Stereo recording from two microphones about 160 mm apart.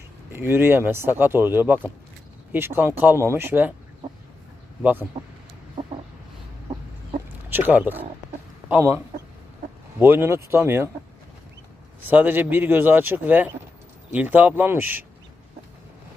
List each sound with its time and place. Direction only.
0.3 s speech: 15° right (ahead or behind)
4.8 s speech: 10° right (ahead or behind)
7.5 s speech: 10° right (ahead or behind)
10.0 s speech: 15° right (ahead or behind)
12.0 s speech: 10° right (ahead or behind)